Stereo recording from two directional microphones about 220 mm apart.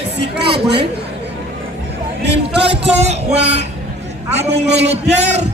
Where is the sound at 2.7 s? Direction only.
30° right (ahead or behind).